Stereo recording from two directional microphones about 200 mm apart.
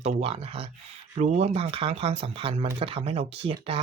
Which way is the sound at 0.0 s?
30° right (ahead or behind).